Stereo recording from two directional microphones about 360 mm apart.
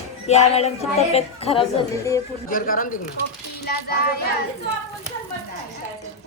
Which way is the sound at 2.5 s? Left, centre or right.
Left.